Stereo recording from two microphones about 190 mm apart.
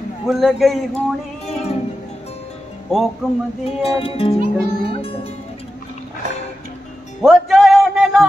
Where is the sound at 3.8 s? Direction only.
30° left (ahead or behind).